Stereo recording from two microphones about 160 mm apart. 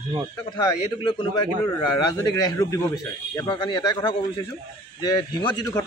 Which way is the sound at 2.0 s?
20° left (ahead or behind).